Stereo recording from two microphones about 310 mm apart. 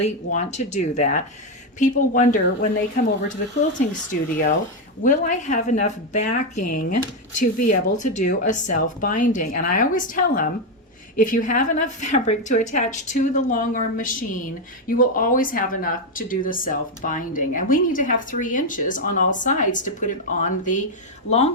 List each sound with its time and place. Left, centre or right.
0.0 s speech: left